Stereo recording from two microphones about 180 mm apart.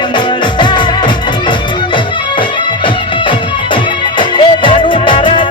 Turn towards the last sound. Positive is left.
turn(degrees=30)  # may be behind; listen again after turning